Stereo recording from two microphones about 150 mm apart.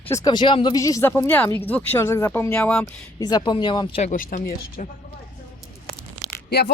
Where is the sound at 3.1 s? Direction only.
25° left (ahead or behind).